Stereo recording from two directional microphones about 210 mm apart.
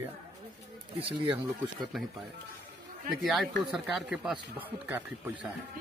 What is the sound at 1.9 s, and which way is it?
Speech, centre (ahead or behind).